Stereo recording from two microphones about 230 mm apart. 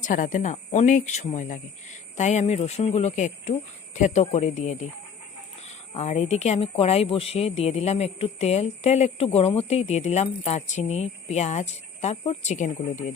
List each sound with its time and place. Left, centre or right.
0.0 s speech: left